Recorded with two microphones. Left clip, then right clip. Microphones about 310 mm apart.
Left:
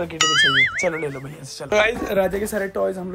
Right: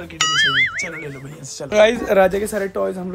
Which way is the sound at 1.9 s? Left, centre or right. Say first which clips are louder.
Right 6 dB; centre.